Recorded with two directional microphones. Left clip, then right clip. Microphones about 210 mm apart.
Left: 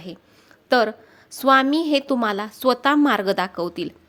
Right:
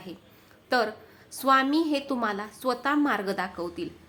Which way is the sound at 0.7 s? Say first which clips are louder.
Left 7 dB; 35° left (ahead or behind).